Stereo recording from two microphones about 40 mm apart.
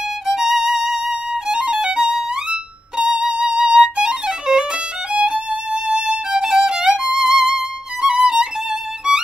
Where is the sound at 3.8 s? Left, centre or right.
Centre.